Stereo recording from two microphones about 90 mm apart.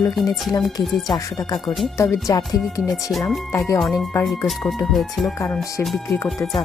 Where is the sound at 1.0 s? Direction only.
45° left (ahead or behind).